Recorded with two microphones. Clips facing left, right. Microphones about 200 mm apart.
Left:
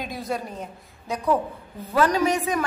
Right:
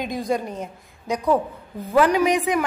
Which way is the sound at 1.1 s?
15° right (ahead or behind).